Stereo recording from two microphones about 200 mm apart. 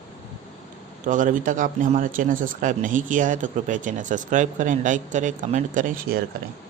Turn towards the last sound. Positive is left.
turn(degrees=-40)  # may be behind; listen again after turning